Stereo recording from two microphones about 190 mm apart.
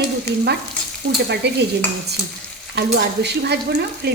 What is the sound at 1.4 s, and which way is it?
Speech, 60° right (ahead or behind).